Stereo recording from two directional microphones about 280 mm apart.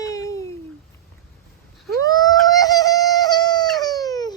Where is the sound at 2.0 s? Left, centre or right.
Centre.